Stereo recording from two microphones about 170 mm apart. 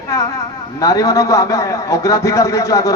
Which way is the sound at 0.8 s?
20° left (ahead or behind).